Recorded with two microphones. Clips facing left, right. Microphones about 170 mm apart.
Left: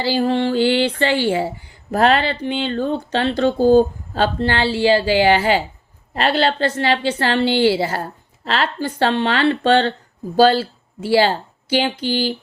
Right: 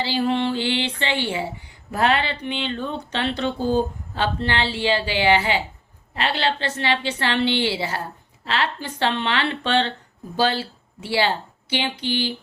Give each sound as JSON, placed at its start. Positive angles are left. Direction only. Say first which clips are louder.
{"t": 0.0, "sound": "speech", "louder": "left 4 dB", "side_deg": 40}